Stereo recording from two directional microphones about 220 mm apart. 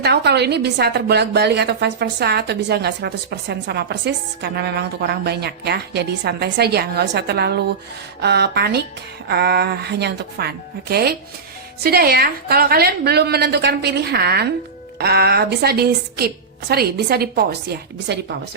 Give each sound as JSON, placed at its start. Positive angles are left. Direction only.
{"t": 0.0, "sound": "a woman's voice", "side_deg": -50}